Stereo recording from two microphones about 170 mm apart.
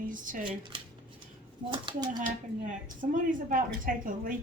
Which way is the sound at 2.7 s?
50° right (ahead or behind).